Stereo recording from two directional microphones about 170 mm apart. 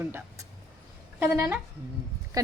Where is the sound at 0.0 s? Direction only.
10° right (ahead or behind).